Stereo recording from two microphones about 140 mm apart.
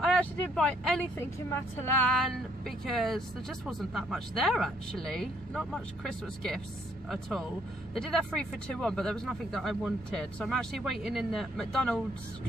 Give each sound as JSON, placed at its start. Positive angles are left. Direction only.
{"t": 0.0, "sound": "speech", "side_deg": 5}